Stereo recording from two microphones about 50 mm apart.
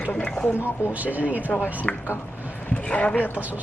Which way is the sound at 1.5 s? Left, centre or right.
Left.